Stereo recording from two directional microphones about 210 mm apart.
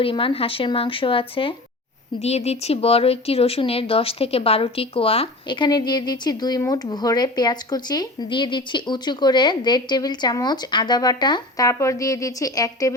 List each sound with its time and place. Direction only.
0.0 s speech: 25° left (ahead or behind)